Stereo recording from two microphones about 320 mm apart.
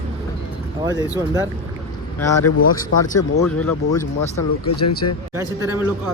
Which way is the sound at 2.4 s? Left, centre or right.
Left.